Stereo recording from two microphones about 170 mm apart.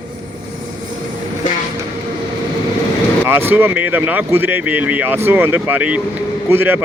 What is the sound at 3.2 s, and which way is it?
Speech, 10° right (ahead or behind).